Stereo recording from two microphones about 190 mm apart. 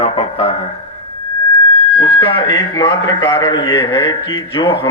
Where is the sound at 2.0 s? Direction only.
25° left (ahead or behind).